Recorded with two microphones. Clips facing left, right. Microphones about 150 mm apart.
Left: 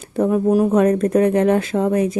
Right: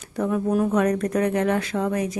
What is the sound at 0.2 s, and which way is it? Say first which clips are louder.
Speech: left 6 dB; 30° left (ahead or behind).